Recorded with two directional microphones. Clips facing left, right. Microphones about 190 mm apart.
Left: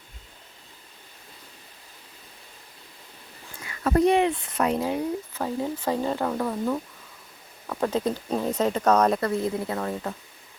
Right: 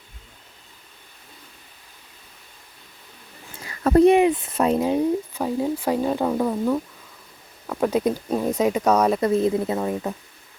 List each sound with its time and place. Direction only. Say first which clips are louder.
3.6 s a sound: right 6 dB; 35° right (ahead or behind)
4.0 s speech: right 5 dB; 20° right (ahead or behind)
9.2 s speech: right 6 dB; 20° right (ahead or behind)